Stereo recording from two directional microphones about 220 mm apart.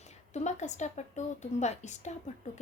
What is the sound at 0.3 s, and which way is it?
A woman's voice, 30° left (ahead or behind).